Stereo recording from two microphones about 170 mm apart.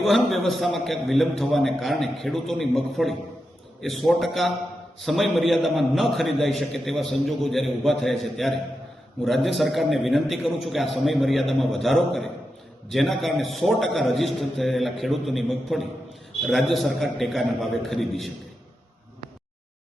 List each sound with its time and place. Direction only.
0.0 s a man's voice: centre (ahead or behind)